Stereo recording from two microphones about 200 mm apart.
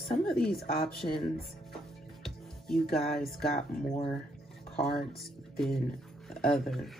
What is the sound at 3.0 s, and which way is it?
Speech, centre (ahead or behind).